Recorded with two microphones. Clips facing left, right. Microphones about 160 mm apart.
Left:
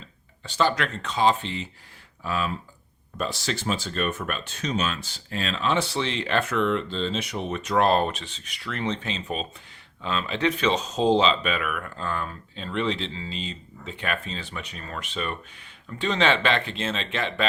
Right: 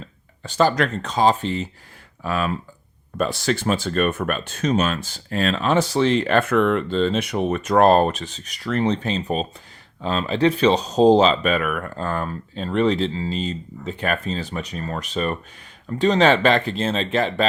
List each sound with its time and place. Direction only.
0.4 s speech: 45° right (ahead or behind)
2.2 s speech: 60° right (ahead or behind); by 17.4 s 40° right (ahead or behind)